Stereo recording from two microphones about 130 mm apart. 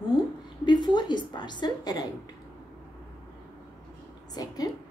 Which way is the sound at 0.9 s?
35° left (ahead or behind).